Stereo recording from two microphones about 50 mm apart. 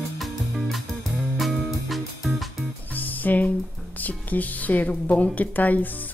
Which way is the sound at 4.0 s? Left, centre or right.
Left.